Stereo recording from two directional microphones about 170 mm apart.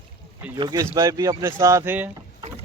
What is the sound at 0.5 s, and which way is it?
Speech, 25° right (ahead or behind).